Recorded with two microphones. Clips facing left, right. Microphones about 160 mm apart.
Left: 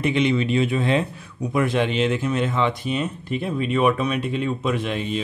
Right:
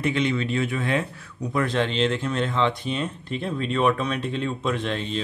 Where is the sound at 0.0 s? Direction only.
20° left (ahead or behind).